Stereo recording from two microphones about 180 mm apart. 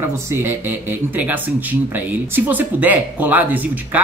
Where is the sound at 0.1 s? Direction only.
15° right (ahead or behind).